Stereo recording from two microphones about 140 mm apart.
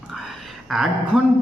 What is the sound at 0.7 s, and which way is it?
Speech, centre (ahead or behind).